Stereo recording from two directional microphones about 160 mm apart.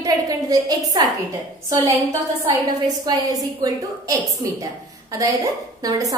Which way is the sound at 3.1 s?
25° right (ahead or behind).